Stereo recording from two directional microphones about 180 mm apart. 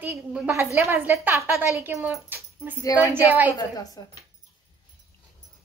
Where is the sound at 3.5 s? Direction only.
20° left (ahead or behind).